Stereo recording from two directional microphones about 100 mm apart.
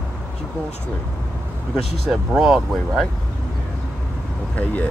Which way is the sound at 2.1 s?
10° right (ahead or behind).